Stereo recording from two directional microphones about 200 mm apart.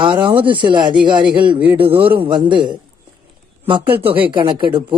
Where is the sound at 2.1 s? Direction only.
25° right (ahead or behind).